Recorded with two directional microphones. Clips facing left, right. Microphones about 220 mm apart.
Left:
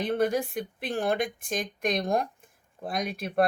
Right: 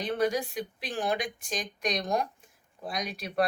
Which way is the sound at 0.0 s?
55° left (ahead or behind).